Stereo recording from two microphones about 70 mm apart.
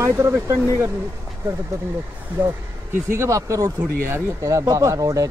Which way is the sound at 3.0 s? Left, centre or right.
Right.